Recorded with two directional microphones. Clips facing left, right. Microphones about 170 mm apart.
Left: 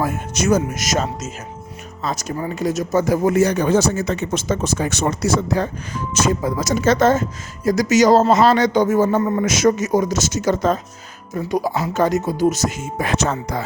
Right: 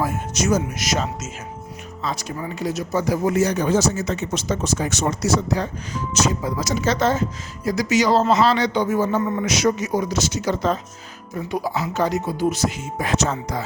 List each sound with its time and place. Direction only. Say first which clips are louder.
0.0 s speech: left 2 dB; 55° left (ahead or behind)